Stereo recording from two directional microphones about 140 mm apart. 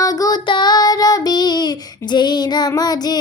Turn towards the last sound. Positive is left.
turn(degrees=30)  # may be behind; listen again after turning